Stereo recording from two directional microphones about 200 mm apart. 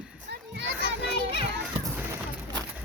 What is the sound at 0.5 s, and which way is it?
Children playing, 65° right (ahead or behind).